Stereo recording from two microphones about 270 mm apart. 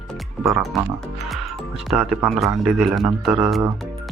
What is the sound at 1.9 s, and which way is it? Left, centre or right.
Speech, centre.